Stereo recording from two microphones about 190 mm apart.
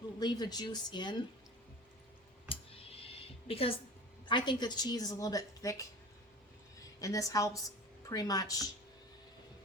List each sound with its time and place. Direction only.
0.2 s a woman's voice: 20° left (ahead or behind)
2.5 s a sound: 30° left (ahead or behind)
4.3 s a woman's voice: 25° left (ahead or behind)
7.0 s a woman's voice: 15° left (ahead or behind)